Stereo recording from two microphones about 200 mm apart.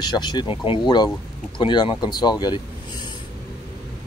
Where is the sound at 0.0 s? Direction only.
20° left (ahead or behind).